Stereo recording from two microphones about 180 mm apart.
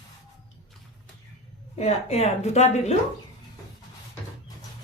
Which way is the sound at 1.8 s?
35° left (ahead or behind).